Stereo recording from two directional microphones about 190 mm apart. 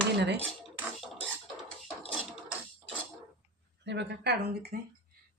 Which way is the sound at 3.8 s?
65° right (ahead or behind).